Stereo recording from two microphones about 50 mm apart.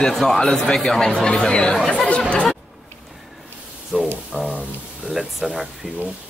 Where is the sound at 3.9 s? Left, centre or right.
Centre.